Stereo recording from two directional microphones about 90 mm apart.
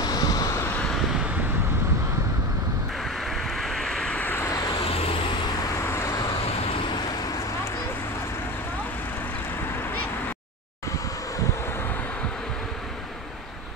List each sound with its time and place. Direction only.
0.0 s vehicle: 45° left (ahead or behind)
3.3 s vehicle: centre (ahead or behind)
4.2 s vehicle: 20° left (ahead or behind)
4.8 s vehicle: 90° left
5.8 s vehicle: 30° left (ahead or behind)
6.3 s vehicle: 90° left; by 7.0 s 75° left (ahead or behind)